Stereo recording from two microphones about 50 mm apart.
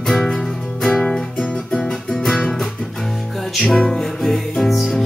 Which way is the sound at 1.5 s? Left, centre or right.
Left.